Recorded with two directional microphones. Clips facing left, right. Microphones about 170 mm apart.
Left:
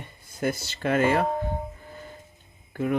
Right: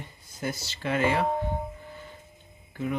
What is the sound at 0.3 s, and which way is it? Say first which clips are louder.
Speech: left 5 dB; 55° left (ahead or behind).